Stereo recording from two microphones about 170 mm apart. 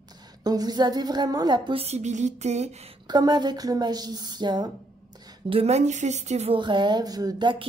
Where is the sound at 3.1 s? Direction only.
25° right (ahead or behind).